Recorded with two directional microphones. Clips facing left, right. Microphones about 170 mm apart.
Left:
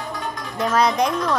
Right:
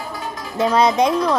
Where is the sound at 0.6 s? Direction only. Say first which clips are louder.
Right 3 dB; 25° right (ahead or behind).